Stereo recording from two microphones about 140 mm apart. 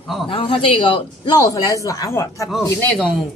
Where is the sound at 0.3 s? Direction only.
40° left (ahead or behind).